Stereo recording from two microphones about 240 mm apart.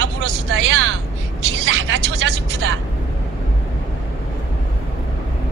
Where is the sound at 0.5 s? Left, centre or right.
Right.